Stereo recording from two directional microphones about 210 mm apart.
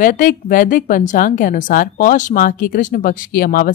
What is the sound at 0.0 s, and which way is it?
Speech, 40° left (ahead or behind).